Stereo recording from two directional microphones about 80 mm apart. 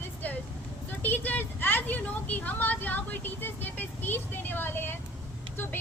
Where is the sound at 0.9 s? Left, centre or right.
Left.